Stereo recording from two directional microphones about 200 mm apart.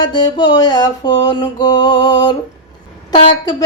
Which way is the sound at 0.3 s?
20° left (ahead or behind).